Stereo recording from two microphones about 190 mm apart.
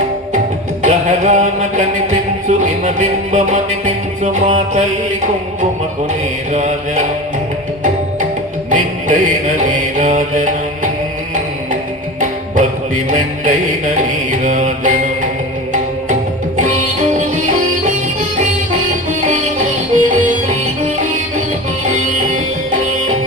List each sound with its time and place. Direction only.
0.8 s music: 40° right (ahead or behind)
6.5 s music: 40° right (ahead or behind)
8.7 s music: 40° right (ahead or behind)
13.1 s music: 40° right (ahead or behind)
16.6 s music: 40° right (ahead or behind)
19.2 s music: 40° right (ahead or behind)